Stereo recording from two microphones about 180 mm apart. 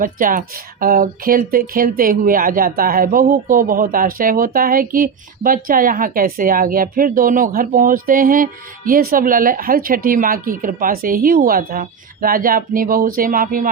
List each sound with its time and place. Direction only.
0.0 s speech: 50° right (ahead or behind)